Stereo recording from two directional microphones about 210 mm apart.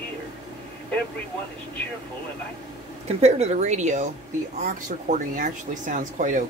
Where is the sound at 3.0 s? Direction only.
30° right (ahead or behind).